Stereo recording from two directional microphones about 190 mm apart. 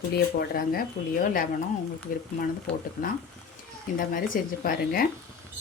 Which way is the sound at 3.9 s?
45° left (ahead or behind).